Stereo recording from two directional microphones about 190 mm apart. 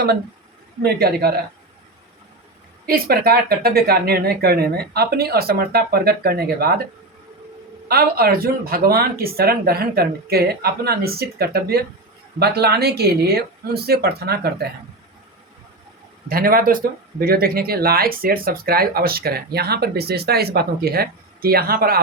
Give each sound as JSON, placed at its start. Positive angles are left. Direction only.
{"t": 0.8, "sound": "speech", "side_deg": -55}
{"t": 2.8, "sound": "speech", "side_deg": -50}
{"t": 7.9, "sound": "speech", "side_deg": -55}
{"t": 16.3, "sound": "speech", "side_deg": -50}